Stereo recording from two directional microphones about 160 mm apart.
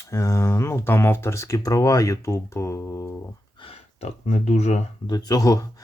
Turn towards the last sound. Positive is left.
turn(degrees=20)  # may be behind; listen again after turning